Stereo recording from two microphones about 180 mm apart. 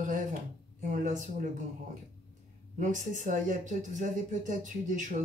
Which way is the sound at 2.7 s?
45° right (ahead or behind).